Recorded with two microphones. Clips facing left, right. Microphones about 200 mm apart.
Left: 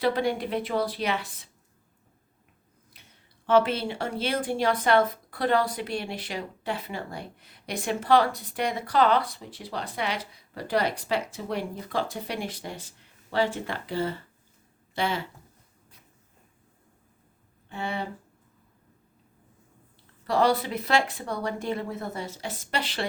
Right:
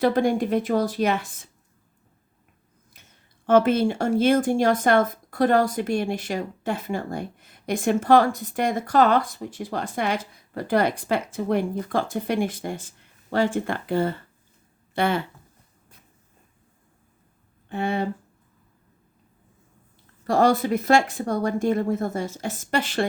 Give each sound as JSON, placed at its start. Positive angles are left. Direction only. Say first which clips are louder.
{"t": 0.0, "sound": "speech", "louder": "right 5 dB", "side_deg": -45}
{"t": 2.9, "sound": "speech", "louder": "right 1 dB", "side_deg": -45}
{"t": 17.7, "sound": "speech", "louder": "right 7 dB", "side_deg": -50}
{"t": 20.2, "sound": "speech", "louder": "right 4 dB", "side_deg": -45}